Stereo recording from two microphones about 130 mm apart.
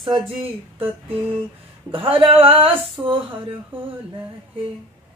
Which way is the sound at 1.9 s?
45° right (ahead or behind).